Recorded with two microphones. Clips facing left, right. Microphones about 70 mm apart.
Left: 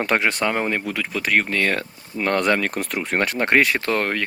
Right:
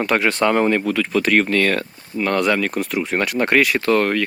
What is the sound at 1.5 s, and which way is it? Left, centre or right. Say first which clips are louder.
Speech: right 3 dB; left.